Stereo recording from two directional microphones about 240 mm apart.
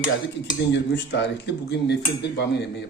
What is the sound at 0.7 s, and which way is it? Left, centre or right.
Speech, left.